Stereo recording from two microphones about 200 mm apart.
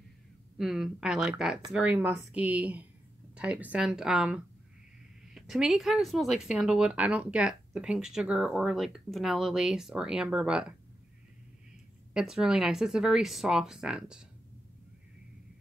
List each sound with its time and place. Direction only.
0.6 s speech: centre (ahead or behind)
12.1 s speech: 5° right (ahead or behind)